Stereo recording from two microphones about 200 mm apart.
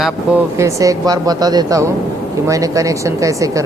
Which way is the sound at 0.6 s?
15° right (ahead or behind).